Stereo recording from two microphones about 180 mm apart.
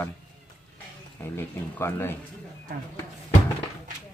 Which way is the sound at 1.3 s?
15° left (ahead or behind).